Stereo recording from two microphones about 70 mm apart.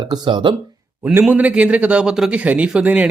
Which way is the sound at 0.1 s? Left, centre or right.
Right.